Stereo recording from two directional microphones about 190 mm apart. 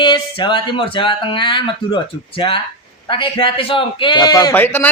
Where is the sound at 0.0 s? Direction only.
25° left (ahead or behind).